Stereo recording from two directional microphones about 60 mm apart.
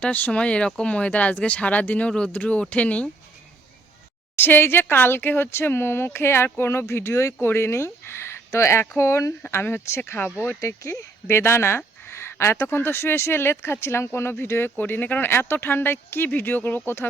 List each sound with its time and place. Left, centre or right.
0.0 s speech: left
4.4 s speech: left
9.6 s speech: left
14.8 s speech: left